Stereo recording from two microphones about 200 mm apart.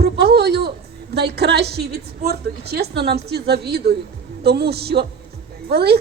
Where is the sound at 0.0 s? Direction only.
55° right (ahead or behind).